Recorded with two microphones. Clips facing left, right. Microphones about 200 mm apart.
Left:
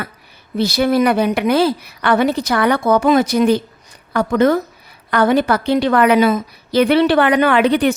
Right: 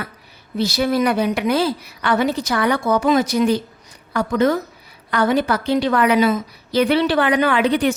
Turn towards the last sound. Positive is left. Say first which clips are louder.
# left 3 dB
turn(degrees=60)  # may be behind; listen again after turning